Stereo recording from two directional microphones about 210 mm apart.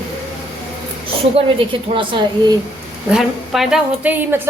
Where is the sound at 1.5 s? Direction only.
25° right (ahead or behind).